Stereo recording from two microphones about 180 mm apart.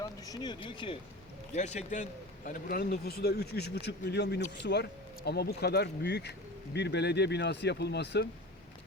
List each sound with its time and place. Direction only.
0.0 s speech: 20° left (ahead or behind)
1.5 s a man's voice: 40° left (ahead or behind); by 8.3 s 70° left (ahead or behind)